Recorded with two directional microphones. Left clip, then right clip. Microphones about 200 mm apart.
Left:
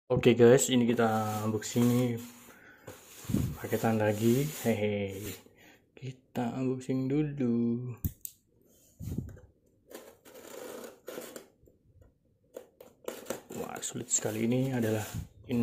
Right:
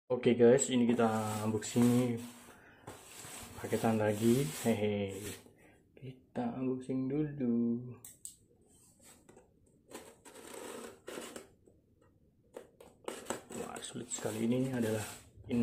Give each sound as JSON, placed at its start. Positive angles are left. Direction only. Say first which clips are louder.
{"t": 0.1, "sound": "speech", "louder": "left 4 dB", "side_deg": 25}
{"t": 6.0, "sound": "speech", "louder": "left 4 dB", "side_deg": 25}
{"t": 13.7, "sound": "speech", "louder": "left 7 dB", "side_deg": 20}